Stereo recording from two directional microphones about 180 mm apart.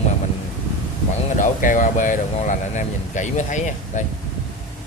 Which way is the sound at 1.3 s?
45° left (ahead or behind).